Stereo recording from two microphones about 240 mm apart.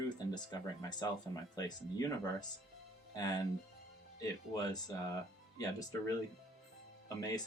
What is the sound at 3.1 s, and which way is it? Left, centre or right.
Speech, centre.